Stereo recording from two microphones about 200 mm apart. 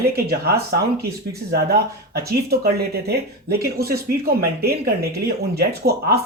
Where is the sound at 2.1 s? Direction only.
50° right (ahead or behind).